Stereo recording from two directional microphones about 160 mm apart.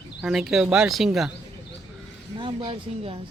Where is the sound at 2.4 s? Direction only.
35° right (ahead or behind).